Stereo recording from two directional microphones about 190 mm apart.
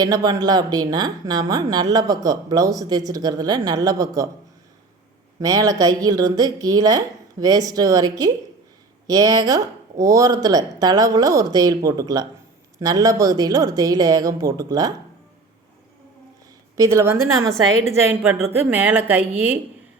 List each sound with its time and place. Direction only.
0.0 s a woman's voice: 20° right (ahead or behind)
5.4 s a woman's voice: 20° right (ahead or behind)
16.7 s speech: 15° right (ahead or behind)